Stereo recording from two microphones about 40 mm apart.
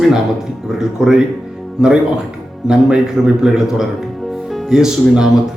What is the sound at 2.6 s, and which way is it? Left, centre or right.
Speech, centre.